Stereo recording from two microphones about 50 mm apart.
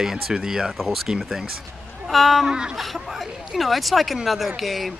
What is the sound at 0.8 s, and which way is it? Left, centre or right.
Speech, centre.